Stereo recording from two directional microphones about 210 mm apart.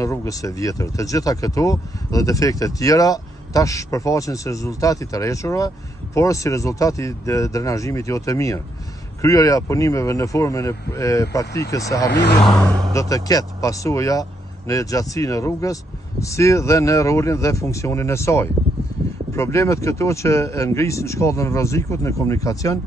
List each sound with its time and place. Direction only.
0.0 s speech: 15° left (ahead or behind)
12.1 s speech: 55° left (ahead or behind)
12.4 s speech: 5° left (ahead or behind)
12.9 s speech: 15° left (ahead or behind)